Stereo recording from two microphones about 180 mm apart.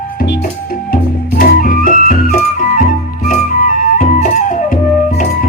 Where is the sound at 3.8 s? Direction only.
45° left (ahead or behind).